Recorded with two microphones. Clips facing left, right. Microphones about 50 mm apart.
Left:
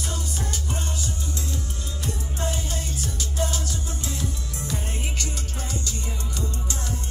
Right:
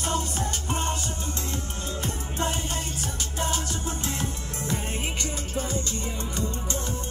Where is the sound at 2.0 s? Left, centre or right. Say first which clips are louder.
Even; right.